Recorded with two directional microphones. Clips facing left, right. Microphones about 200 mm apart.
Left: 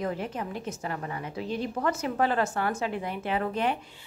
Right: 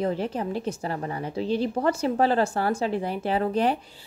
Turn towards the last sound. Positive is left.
turn(degrees=-35)  # may be behind; listen again after turning